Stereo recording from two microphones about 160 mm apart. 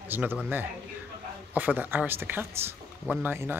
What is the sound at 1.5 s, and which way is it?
Speech, 10° right (ahead or behind).